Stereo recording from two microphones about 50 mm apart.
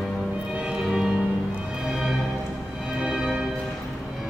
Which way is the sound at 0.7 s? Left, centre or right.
Centre.